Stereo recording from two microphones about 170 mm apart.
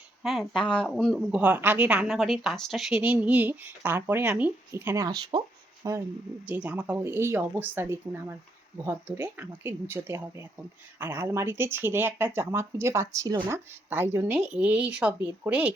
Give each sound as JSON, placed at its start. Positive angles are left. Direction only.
{"t": 0.2, "sound": "a woman's voice", "side_deg": 0}
{"t": 6.4, "sound": "a woman's voice", "side_deg": -10}